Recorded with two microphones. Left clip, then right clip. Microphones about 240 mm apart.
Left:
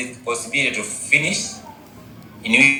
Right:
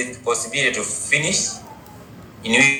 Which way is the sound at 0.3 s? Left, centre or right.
Right.